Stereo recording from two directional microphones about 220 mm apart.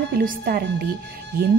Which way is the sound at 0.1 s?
45° right (ahead or behind).